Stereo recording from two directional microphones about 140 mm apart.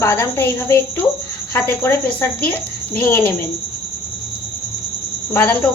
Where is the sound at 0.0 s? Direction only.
20° left (ahead or behind).